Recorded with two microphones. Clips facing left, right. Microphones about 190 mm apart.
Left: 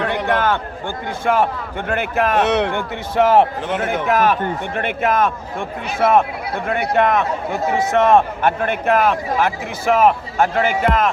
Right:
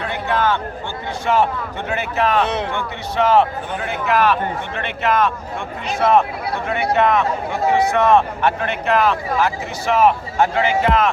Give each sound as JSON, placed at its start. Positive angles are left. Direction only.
{"t": 0.0, "sound": "a sound", "side_deg": 55}
{"t": 1.2, "sound": "speech", "side_deg": 50}
{"t": 2.4, "sound": "speech", "side_deg": 75}
{"t": 3.2, "sound": "speech", "side_deg": 50}